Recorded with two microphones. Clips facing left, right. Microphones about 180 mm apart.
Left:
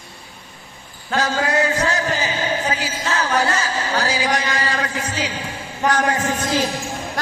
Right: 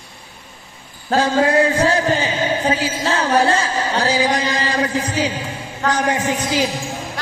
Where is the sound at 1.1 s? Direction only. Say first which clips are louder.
Right 5 dB; 30° right (ahead or behind).